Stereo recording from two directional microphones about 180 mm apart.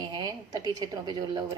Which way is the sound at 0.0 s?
25° right (ahead or behind).